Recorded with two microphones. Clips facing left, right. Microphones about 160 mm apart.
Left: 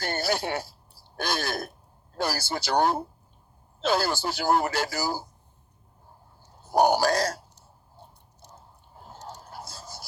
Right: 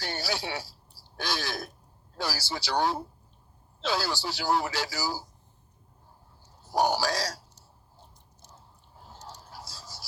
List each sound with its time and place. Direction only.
0.0 s speech: 50° left (ahead or behind)
6.7 s speech: 50° left (ahead or behind)
9.0 s a sound: 50° left (ahead or behind)